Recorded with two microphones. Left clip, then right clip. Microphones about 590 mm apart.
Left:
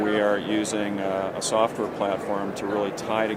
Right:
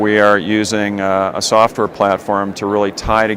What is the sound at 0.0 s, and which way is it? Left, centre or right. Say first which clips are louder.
Speech: right 11 dB; right.